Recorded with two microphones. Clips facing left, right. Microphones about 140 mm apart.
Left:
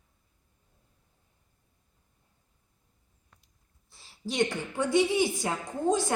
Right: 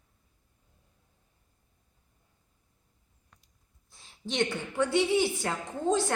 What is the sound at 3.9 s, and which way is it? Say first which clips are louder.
A woman's voice: even; centre (ahead or behind).